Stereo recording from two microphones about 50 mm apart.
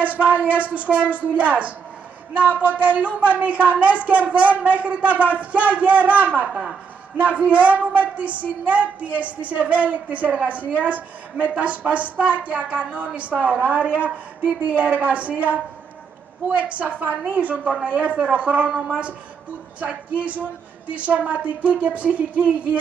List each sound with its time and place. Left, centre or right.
0.0 s a woman's voice: right
6.5 s a woman's voice: centre
7.2 s a woman's voice: right